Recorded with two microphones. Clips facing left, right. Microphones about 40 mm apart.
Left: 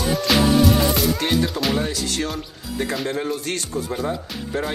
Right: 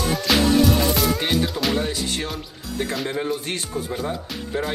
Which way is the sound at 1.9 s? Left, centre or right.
Centre.